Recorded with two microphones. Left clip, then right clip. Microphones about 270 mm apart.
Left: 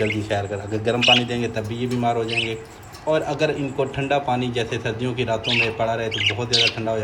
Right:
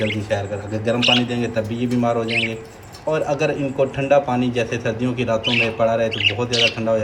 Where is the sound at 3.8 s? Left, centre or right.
Centre.